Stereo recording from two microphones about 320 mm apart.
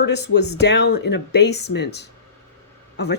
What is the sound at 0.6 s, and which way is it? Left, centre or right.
Speech, left.